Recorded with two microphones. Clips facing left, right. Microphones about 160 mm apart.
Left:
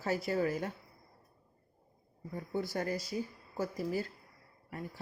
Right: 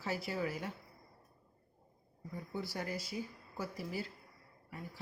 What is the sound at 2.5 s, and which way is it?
Speech, 50° left (ahead or behind).